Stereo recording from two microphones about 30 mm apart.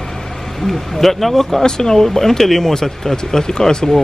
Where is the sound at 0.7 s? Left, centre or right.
Centre.